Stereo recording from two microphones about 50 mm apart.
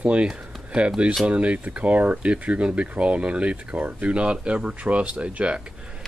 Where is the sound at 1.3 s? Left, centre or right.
Right.